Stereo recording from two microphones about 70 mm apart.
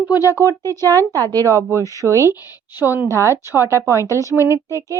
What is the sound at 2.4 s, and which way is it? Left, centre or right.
Speech, right.